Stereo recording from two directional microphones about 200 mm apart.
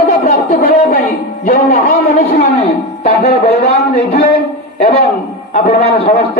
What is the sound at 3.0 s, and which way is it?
A man's voice, 50° left (ahead or behind).